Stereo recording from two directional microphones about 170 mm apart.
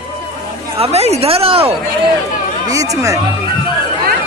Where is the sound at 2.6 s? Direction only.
20° right (ahead or behind).